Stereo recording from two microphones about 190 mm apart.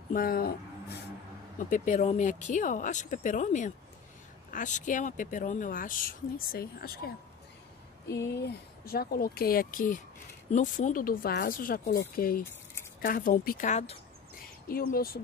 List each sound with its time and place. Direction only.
0.1 s speech: 50° left (ahead or behind)
1.6 s speech: 40° left (ahead or behind)
8.4 s speech: 55° left (ahead or behind)
14.7 s speech: 50° left (ahead or behind)